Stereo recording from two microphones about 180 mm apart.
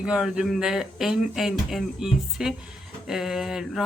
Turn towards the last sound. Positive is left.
turn(degrees=0)  # may be behind; listen again after turning